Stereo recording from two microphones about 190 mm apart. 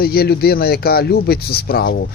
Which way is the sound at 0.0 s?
55° left (ahead or behind).